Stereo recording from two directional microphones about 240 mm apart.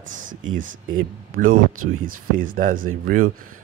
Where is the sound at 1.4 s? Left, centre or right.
Right.